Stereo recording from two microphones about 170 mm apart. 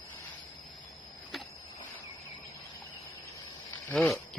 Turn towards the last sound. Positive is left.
turn(degrees=0)  # may be behind; listen again after turning